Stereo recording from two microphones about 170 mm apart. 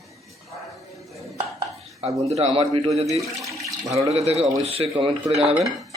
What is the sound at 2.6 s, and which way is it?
Speech, 35° right (ahead or behind).